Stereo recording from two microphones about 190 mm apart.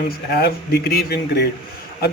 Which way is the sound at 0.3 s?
55° left (ahead or behind).